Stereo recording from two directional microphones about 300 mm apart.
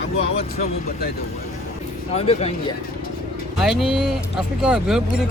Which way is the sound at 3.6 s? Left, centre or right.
Centre.